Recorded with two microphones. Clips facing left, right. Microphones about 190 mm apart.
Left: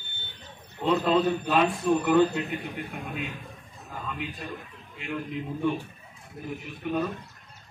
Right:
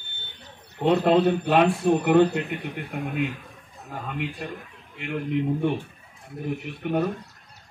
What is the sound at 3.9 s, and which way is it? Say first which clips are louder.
A man's voice: right 4 dB; 65° right (ahead or behind).